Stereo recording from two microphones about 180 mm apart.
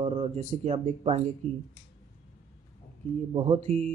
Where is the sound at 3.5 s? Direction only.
40° right (ahead or behind).